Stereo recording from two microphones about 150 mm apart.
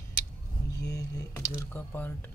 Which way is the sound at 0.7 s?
25° left (ahead or behind).